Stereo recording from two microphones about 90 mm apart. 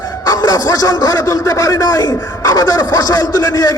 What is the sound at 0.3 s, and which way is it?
A man's voice, 40° left (ahead or behind).